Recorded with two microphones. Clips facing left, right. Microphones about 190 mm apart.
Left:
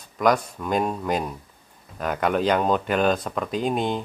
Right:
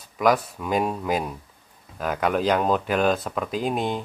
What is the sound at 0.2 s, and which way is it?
Speech, 5° right (ahead or behind).